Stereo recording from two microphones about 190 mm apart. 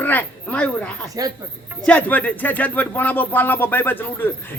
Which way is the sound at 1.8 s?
5° left (ahead or behind).